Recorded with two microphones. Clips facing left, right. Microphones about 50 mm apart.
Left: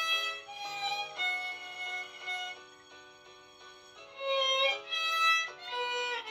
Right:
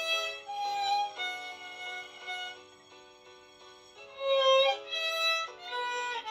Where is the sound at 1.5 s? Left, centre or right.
Left.